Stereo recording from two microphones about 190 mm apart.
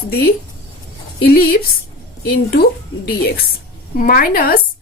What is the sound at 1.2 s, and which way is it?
Speech, 55° left (ahead or behind).